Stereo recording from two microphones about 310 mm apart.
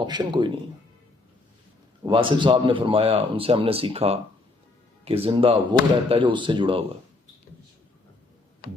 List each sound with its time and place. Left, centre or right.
0.0 s a man's voice: centre
2.0 s a man's voice: centre